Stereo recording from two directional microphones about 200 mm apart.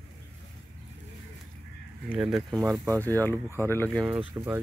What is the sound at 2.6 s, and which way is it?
Speech, 15° right (ahead or behind).